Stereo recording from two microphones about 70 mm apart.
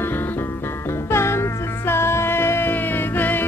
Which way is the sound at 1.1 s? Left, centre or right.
Left.